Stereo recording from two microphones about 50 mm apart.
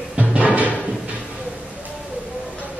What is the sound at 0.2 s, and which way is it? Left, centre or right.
Music, right.